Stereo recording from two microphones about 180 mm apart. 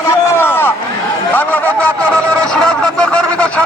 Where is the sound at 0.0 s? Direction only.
15° left (ahead or behind).